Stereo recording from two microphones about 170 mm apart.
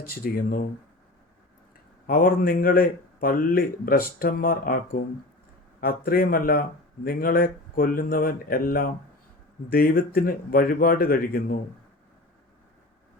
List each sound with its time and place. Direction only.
0.0 s speech: 60° left (ahead or behind)
2.0 s speech: 60° left (ahead or behind)